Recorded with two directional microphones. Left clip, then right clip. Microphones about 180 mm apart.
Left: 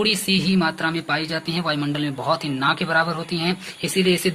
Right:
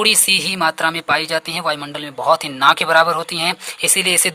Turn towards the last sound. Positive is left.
turn(degrees=-50)  # may be behind; listen again after turning